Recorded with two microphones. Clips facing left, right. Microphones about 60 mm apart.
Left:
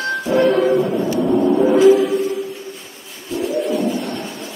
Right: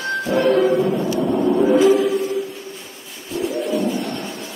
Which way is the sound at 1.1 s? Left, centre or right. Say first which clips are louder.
Left 4 dB; centre.